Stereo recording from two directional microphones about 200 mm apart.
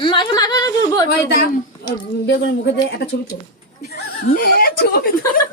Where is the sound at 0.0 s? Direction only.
25° left (ahead or behind).